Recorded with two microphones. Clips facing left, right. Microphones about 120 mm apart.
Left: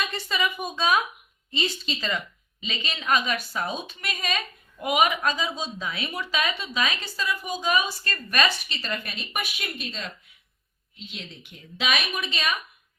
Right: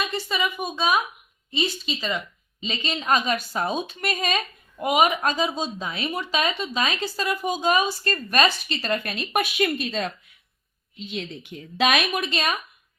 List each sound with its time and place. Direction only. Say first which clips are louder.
0.1 s a woman's voice: right 1 dB; 15° right (ahead or behind)
2.6 s speech: right 5 dB; 30° right (ahead or behind)
4.8 s speech: right 2 dB; 25° right (ahead or behind); by 9.4 s 45° right (ahead or behind)
9.6 s a woman's voice: right 11 dB; 65° right (ahead or behind)
11.8 s speech: right 6 dB; 55° right (ahead or behind)